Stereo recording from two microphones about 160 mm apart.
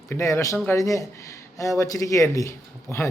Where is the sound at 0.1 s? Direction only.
20° left (ahead or behind).